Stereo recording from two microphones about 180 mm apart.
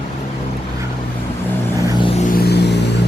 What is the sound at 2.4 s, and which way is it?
Music, 65° left (ahead or behind).